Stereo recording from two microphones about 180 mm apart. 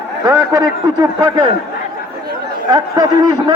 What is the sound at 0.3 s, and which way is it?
Speech, 20° right (ahead or behind).